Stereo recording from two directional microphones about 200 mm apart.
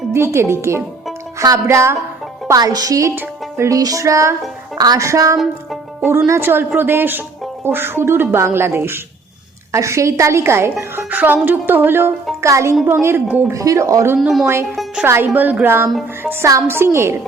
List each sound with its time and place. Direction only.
0.1 s a woman's voice: 15° right (ahead or behind)
14.2 s a woman's voice: centre (ahead or behind)